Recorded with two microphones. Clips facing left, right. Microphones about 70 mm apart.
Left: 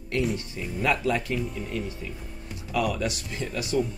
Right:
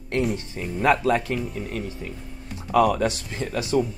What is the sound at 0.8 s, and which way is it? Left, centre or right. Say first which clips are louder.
Speech: right 5 dB; right.